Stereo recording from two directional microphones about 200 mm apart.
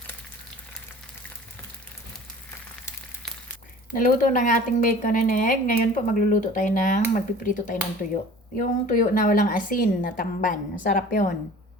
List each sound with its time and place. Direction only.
3.9 s a woman's voice: 40° left (ahead or behind)